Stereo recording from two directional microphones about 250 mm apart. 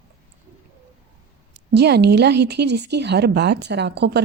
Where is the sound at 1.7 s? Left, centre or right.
Right.